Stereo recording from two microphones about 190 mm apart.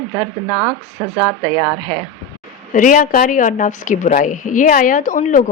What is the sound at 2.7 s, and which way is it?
A woman's voice, 45° left (ahead or behind).